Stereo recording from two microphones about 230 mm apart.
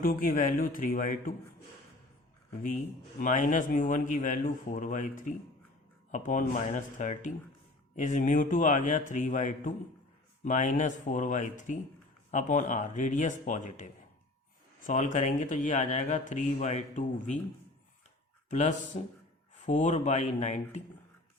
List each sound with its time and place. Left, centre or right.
0.0 s speech: left
3.2 s speech: left
18.5 s speech: left